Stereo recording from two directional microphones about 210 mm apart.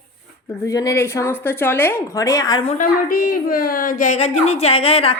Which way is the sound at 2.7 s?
40° left (ahead or behind).